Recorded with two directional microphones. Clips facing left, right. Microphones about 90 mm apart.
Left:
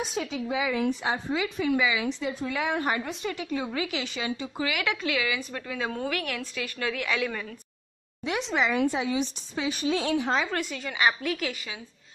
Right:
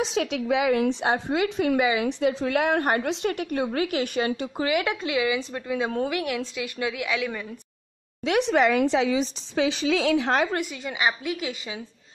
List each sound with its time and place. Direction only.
0.0 s a woman's voice: 85° right; by 4.6 s 50° right (ahead or behind)
4.6 s a woman's voice: 30° right (ahead or behind); by 7.4 s centre (ahead or behind)
8.3 s a woman's voice: 65° right (ahead or behind); by 10.4 s 80° right
10.5 s a woman's voice: 15° right (ahead or behind)